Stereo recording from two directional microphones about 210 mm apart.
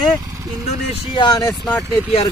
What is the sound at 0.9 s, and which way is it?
Speech, 20° left (ahead or behind).